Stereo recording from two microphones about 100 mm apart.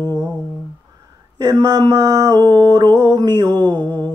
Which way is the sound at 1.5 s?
35° right (ahead or behind).